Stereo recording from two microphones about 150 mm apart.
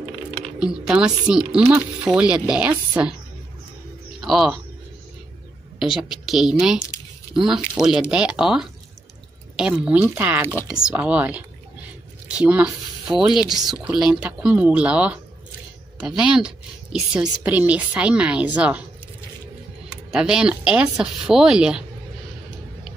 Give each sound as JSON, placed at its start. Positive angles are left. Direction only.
{"t": 0.6, "sound": "speech", "side_deg": -5}
{"t": 4.2, "sound": "speech", "side_deg": 0}
{"t": 5.8, "sound": "a woman's voice", "side_deg": 0}
{"t": 20.1, "sound": "speech", "side_deg": -5}